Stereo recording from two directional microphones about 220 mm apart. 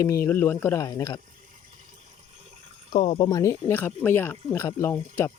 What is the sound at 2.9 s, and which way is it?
Speech, 25° left (ahead or behind).